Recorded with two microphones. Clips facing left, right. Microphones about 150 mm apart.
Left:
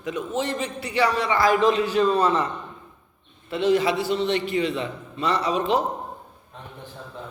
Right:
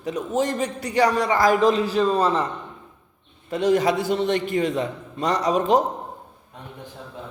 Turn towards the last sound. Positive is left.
turn(degrees=-45)  # may be behind; listen again after turning